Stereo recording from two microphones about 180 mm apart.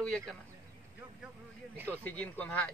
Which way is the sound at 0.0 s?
5° left (ahead or behind).